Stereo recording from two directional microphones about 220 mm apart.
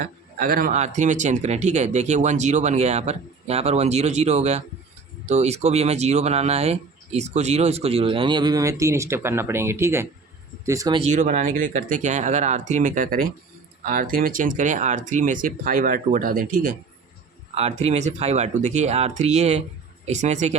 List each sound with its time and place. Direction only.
0.0 s speech: 40° right (ahead or behind)
17.5 s speech: 30° right (ahead or behind)